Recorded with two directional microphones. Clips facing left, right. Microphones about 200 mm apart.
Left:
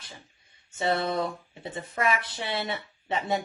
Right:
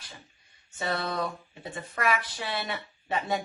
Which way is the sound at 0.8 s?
25° left (ahead or behind).